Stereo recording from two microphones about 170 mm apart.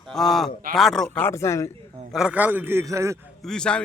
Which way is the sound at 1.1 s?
15° left (ahead or behind).